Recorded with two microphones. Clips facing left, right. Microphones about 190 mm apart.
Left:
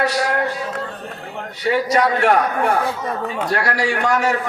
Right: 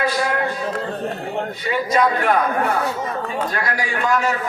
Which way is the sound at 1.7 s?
80° left.